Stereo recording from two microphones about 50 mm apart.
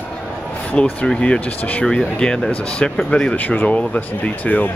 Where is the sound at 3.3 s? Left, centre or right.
Left.